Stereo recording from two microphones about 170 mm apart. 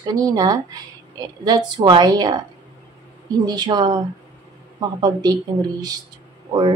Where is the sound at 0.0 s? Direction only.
20° right (ahead or behind).